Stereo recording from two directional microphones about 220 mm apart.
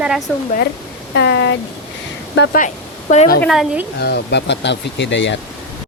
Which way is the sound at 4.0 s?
50° left (ahead or behind).